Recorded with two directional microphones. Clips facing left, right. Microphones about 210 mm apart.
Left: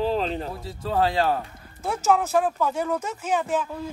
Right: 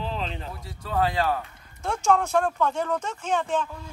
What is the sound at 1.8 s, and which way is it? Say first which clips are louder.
Speech: left 1 dB; 5° left (ahead or behind).